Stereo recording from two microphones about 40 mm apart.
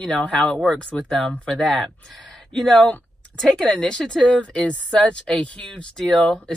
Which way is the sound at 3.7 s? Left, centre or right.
Centre.